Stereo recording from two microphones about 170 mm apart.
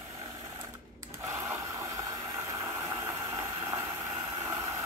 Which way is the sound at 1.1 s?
15° right (ahead or behind).